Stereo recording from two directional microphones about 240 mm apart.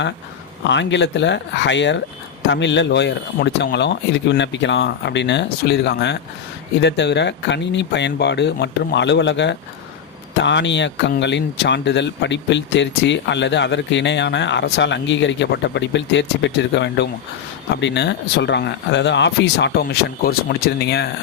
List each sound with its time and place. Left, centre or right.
0.7 s speech: left